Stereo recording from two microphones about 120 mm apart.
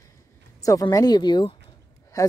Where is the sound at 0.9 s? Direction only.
35° left (ahead or behind).